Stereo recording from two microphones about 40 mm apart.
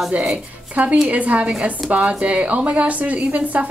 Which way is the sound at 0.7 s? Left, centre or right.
Right.